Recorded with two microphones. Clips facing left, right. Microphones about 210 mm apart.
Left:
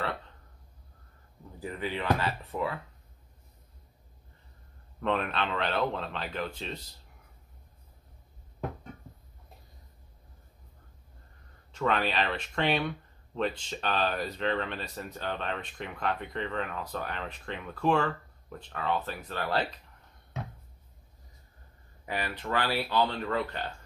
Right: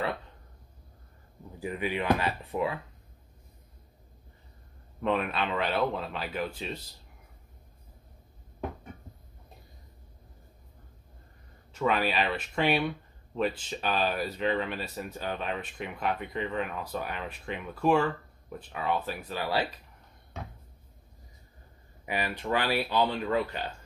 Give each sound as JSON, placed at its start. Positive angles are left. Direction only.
{"t": 1.6, "sound": "speech", "side_deg": -15}
{"t": 5.0, "sound": "speech", "side_deg": -5}
{"t": 11.7, "sound": "speech", "side_deg": -5}
{"t": 22.0, "sound": "speech", "side_deg": -10}